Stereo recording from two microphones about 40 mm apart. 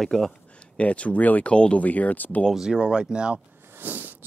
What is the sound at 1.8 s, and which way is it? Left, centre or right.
Speech, left.